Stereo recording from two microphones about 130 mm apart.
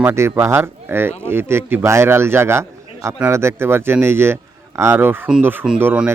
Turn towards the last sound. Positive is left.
turn(degrees=-15)  # may be behind; listen again after turning